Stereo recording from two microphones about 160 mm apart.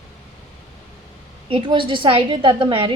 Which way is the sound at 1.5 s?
30° right (ahead or behind).